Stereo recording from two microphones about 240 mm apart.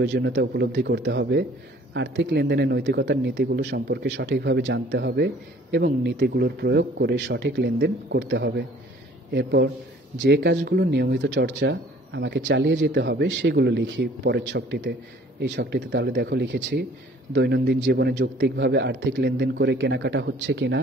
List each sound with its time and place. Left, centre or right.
0.0 s speech: right